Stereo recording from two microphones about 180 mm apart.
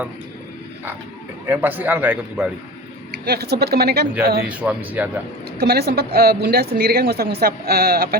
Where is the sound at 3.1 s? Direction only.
60° right (ahead or behind).